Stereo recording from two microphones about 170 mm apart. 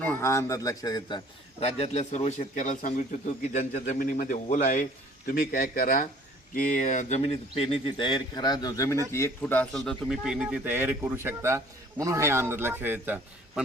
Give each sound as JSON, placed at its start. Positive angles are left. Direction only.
{"t": 0.0, "sound": "a man's voice", "side_deg": 10}
{"t": 3.9, "sound": "speech", "side_deg": 55}
{"t": 4.4, "sound": "speech", "side_deg": 45}
{"t": 5.3, "sound": "a man's voice", "side_deg": 60}